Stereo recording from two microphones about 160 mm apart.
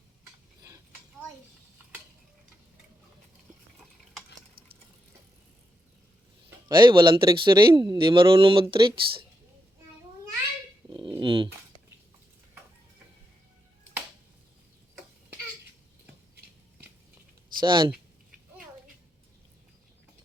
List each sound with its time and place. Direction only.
6.7 s a man's voice: 30° right (ahead or behind)
10.8 s dog: 30° right (ahead or behind)
11.2 s speech: 30° right (ahead or behind)
17.6 s a man's voice: 30° right (ahead or behind)